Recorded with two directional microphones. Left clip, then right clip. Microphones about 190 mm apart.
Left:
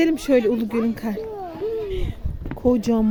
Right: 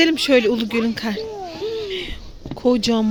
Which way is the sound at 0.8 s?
10° left (ahead or behind).